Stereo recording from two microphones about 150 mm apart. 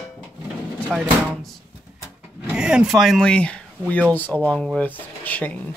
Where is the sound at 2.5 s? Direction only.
5° right (ahead or behind); by 5.6 s 10° left (ahead or behind).